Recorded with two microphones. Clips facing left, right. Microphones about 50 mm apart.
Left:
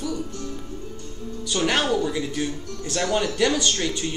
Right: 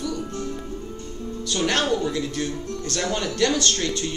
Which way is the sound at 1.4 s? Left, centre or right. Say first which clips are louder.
Even; centre.